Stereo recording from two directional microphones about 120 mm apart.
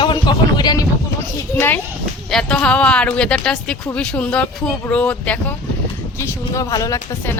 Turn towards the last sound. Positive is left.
turn(degrees=30)  # may be behind; listen again after turning